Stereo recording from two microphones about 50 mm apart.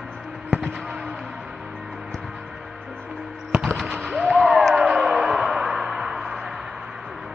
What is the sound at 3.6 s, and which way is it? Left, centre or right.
Fireworks, centre.